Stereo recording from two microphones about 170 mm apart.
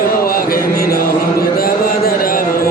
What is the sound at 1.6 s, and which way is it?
Mantra, 60° left (ahead or behind).